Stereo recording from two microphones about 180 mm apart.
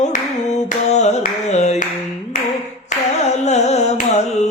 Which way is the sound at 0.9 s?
40° left (ahead or behind).